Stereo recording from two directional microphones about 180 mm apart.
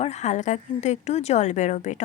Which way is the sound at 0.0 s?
40° left (ahead or behind).